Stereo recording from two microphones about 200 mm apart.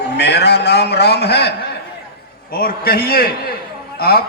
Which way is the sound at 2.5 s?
50° left (ahead or behind).